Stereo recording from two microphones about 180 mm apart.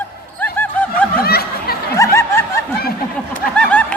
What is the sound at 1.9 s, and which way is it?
Snicker, 15° left (ahead or behind).